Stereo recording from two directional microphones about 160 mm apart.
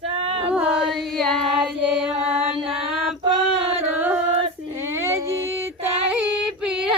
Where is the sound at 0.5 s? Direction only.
5° right (ahead or behind).